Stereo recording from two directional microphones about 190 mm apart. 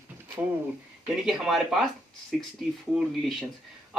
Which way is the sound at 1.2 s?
Centre (ahead or behind).